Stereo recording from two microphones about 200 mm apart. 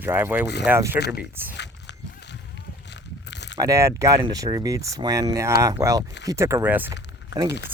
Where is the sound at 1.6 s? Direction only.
60° left (ahead or behind).